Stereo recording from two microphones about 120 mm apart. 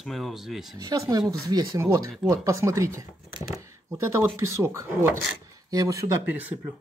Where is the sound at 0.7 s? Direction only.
30° right (ahead or behind).